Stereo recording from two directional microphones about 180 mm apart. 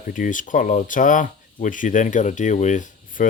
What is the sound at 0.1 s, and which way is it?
Speech, 45° left (ahead or behind).